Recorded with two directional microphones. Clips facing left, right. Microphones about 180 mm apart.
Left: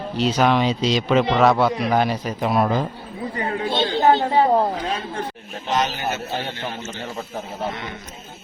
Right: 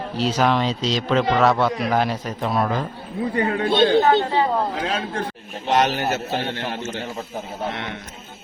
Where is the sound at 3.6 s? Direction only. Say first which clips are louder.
Right 2 dB; 55° right (ahead or behind).